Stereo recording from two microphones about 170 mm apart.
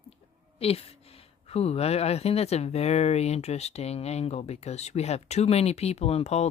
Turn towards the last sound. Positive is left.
turn(degrees=40)  # may be behind; listen again after turning